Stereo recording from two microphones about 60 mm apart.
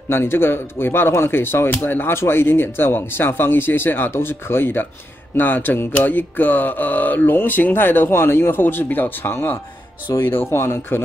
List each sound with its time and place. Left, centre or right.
0.1 s speech: left